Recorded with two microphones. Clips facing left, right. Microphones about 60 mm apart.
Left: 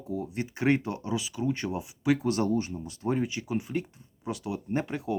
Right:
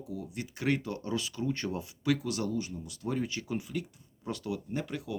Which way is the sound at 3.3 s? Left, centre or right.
Centre.